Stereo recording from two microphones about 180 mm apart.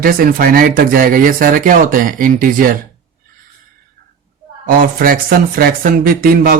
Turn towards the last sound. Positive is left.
turn(degrees=-55)  # may be behind; listen again after turning